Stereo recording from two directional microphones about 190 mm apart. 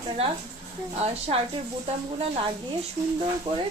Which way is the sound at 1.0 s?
30° right (ahead or behind).